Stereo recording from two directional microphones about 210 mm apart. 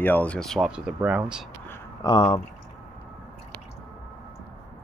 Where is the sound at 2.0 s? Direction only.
20° left (ahead or behind).